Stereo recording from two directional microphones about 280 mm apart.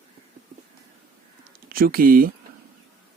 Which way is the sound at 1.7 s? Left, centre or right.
Right.